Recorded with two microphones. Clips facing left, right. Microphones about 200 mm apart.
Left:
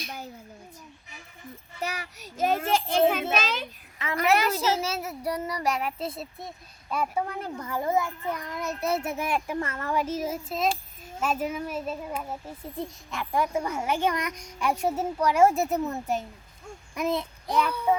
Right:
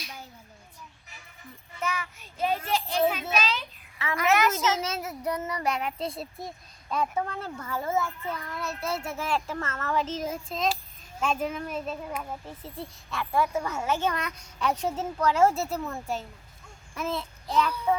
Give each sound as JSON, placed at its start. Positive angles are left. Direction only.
{"t": 0.0, "sound": "a sound", "side_deg": 55}
{"t": 1.8, "sound": "child singing", "side_deg": 35}
{"t": 3.1, "sound": "a sound", "side_deg": 50}
{"t": 4.1, "sound": "a woman's voice", "side_deg": 35}
{"t": 4.8, "sound": "a child's voice", "side_deg": 10}
{"t": 12.6, "sound": "a child's voice", "side_deg": 15}